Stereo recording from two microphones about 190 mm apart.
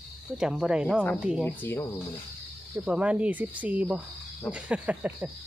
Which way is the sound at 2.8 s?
5° right (ahead or behind).